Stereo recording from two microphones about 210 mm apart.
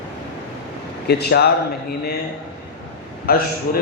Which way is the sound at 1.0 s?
50° left (ahead or behind).